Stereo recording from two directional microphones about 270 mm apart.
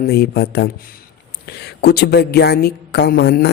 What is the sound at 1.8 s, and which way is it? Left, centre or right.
Speech, left.